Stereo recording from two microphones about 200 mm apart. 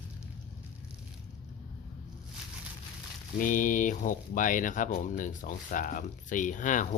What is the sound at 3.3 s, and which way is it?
Speech, 40° left (ahead or behind).